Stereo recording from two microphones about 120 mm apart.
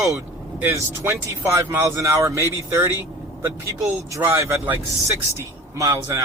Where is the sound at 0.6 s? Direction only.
20° right (ahead or behind).